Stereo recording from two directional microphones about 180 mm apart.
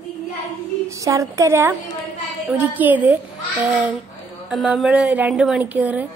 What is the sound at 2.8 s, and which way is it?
Speech, 10° right (ahead or behind).